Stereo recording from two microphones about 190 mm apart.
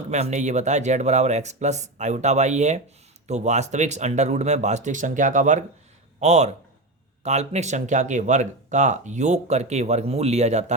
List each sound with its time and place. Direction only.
0.1 s speech: 35° right (ahead or behind)